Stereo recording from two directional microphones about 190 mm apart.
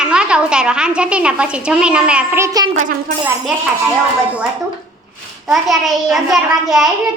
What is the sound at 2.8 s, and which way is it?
Speech, 35° right (ahead or behind).